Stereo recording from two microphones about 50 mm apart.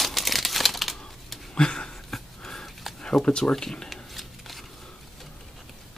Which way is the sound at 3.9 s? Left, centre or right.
Centre.